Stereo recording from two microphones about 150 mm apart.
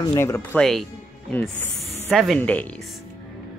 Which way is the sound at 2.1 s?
Centre (ahead or behind).